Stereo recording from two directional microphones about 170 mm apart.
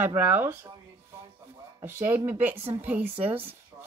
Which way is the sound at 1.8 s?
15° right (ahead or behind).